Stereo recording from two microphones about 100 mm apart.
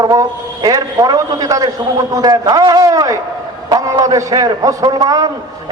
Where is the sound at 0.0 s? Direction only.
40° right (ahead or behind).